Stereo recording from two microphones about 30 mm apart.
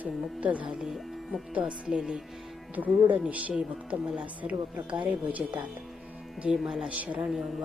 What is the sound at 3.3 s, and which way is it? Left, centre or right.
Speech, right.